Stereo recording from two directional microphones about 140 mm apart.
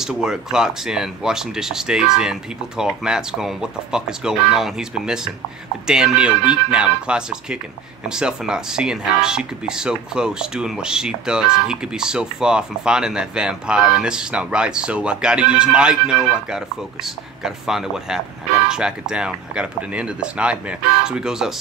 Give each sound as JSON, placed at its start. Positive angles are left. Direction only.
{"t": 0.0, "sound": "speech", "side_deg": -5}